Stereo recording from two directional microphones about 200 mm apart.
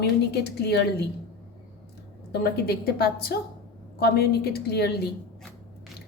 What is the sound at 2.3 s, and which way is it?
A woman's voice, 55° left (ahead or behind).